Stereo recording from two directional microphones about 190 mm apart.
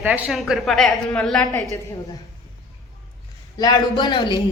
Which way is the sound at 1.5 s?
15° left (ahead or behind).